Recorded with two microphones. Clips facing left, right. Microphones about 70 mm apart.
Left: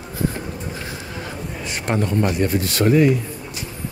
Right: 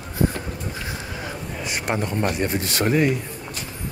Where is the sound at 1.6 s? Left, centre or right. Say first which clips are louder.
Left 2 dB; centre.